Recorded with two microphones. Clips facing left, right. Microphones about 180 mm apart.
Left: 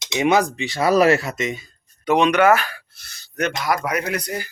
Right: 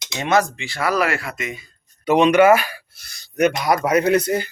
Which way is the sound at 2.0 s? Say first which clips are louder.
Right 3 dB; 5° right (ahead or behind).